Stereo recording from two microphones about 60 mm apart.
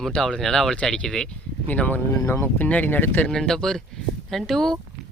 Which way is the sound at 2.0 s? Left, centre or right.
Left.